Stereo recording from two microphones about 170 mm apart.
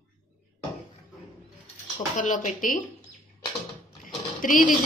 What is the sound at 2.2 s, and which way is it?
Speech, 45° left (ahead or behind).